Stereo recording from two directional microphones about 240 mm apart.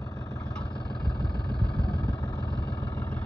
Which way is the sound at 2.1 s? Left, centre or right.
Centre.